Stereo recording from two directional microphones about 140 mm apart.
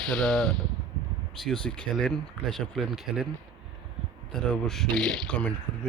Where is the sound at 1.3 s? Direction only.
5° left (ahead or behind).